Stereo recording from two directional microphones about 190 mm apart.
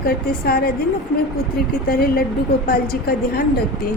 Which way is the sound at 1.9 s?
55° left (ahead or behind).